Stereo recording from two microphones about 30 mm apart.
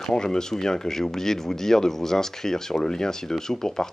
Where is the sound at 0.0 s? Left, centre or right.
Centre.